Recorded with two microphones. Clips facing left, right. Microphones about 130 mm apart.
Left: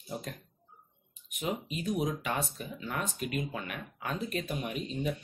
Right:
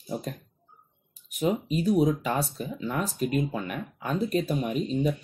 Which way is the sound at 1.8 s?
35° right (ahead or behind).